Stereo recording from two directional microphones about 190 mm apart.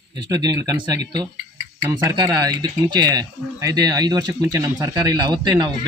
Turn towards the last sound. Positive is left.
turn(degrees=-20)  # may be behind; listen again after turning